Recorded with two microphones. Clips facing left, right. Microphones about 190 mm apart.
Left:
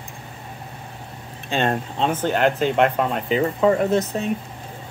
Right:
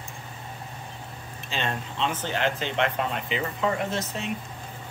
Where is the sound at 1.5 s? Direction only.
45° left (ahead or behind).